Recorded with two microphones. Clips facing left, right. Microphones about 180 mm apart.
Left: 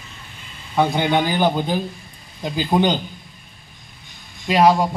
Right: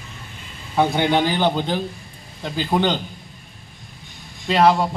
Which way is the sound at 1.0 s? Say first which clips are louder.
Even; 10° left (ahead or behind).